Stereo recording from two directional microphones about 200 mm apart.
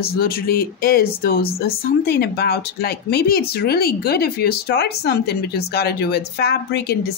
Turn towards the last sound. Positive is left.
turn(degrees=50)  # may be behind; listen again after turning